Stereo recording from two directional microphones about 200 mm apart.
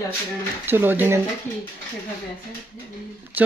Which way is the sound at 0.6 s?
10° right (ahead or behind).